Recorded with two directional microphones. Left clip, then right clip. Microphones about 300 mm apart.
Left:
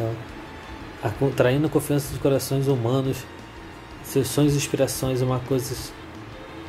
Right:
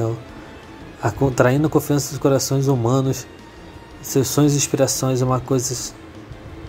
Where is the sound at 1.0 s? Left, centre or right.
Centre.